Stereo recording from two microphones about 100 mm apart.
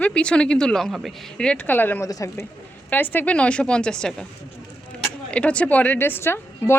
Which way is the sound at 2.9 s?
20° left (ahead or behind).